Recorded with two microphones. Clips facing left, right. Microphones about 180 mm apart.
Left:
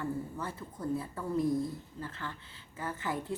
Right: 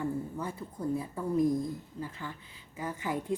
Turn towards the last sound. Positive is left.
turn(degrees=-15)  # may be behind; listen again after turning